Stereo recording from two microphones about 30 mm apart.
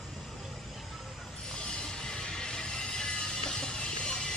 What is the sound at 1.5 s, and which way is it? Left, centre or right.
Music, left.